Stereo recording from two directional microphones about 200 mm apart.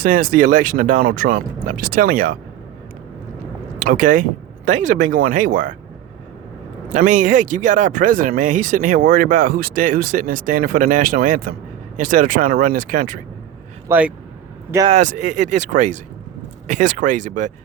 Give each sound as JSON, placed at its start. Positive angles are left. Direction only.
{"t": 0.0, "sound": "speech", "side_deg": -45}
{"t": 3.8, "sound": "speech", "side_deg": -45}
{"t": 6.9, "sound": "speech", "side_deg": -40}
{"t": 13.8, "sound": "speech", "side_deg": -10}
{"t": 14.8, "sound": "speech", "side_deg": -35}